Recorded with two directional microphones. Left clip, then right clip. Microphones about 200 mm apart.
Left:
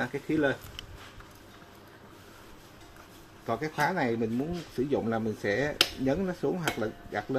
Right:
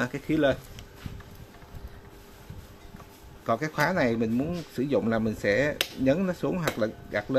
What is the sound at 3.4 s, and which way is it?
Speech, 50° right (ahead or behind).